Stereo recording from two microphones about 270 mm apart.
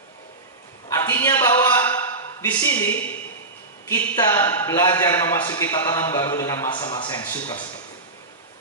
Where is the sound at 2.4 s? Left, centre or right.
Centre.